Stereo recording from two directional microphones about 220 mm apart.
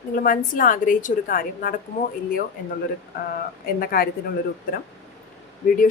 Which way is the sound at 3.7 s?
40° left (ahead or behind).